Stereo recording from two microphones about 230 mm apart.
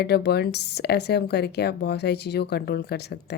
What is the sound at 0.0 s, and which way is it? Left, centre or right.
A woman's voice, left.